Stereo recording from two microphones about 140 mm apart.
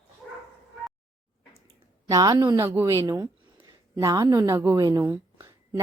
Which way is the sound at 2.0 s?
25° right (ahead or behind).